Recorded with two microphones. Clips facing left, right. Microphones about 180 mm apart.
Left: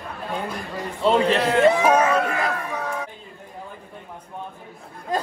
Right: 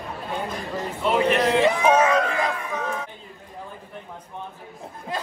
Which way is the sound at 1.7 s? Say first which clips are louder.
Left 4 dB; 30° left (ahead or behind).